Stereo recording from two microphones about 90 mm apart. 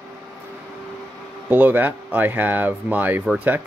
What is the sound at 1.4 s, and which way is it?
Speech, 20° right (ahead or behind).